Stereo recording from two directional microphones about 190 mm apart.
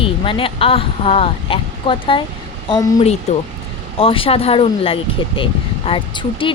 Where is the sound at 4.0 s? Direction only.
30° left (ahead or behind).